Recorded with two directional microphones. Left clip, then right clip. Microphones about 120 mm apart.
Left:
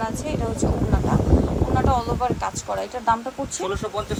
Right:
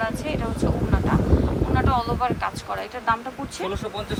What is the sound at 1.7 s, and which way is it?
A woman's voice, 35° left (ahead or behind).